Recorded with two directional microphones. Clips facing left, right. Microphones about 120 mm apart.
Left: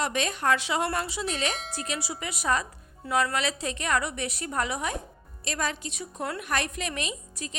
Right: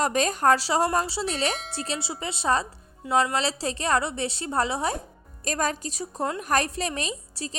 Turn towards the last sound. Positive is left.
turn(degrees=-35)  # may be behind; listen again after turning